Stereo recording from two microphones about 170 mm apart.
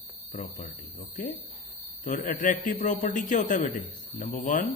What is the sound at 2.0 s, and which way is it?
A man's voice, 50° left (ahead or behind).